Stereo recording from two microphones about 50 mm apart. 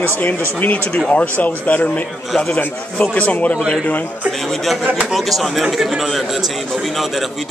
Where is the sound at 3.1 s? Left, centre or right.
Left.